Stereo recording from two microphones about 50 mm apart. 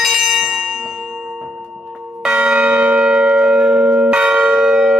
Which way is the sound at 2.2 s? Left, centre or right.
Centre.